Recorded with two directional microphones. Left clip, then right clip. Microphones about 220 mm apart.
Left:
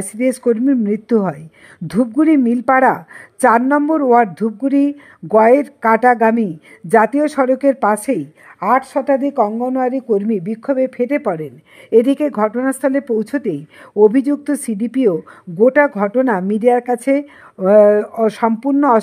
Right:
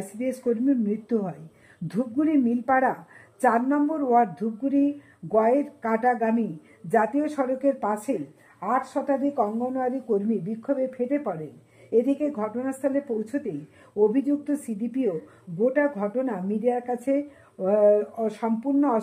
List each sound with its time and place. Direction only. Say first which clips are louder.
0.2 s a woman's voice: left 11 dB; 30° left (ahead or behind)